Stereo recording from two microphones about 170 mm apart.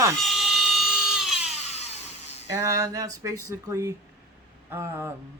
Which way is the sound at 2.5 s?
20° right (ahead or behind).